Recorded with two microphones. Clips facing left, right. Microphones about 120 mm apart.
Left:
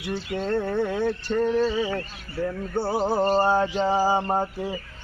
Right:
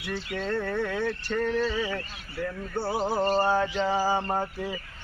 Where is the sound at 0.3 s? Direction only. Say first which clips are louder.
Left 4 dB; 25° left (ahead or behind).